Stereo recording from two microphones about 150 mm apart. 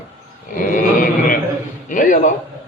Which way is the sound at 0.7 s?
65° left (ahead or behind).